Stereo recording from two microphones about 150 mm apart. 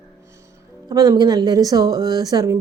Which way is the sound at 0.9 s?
25° right (ahead or behind).